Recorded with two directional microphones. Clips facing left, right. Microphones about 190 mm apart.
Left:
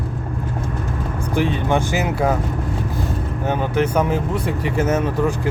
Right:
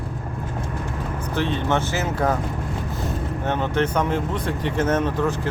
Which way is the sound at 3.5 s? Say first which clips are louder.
Left 3 dB; 10° left (ahead or behind).